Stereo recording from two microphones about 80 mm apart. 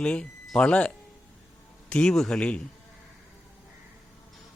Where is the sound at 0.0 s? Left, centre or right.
Centre.